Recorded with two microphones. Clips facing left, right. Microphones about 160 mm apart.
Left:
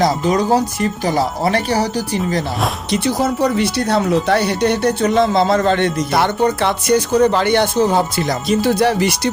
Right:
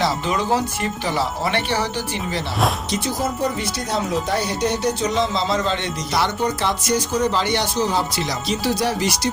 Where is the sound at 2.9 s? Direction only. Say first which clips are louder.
Left 6 dB; 70° left (ahead or behind).